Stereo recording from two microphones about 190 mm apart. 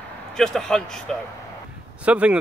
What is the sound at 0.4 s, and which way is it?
Speech, 5° left (ahead or behind).